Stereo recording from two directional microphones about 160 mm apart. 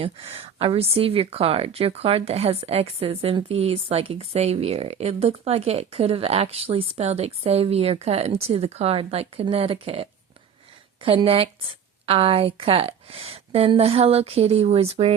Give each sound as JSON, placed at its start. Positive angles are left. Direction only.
{"t": 0.0, "sound": "speech", "side_deg": -40}